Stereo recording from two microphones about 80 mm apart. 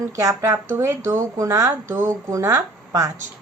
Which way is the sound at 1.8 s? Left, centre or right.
Right.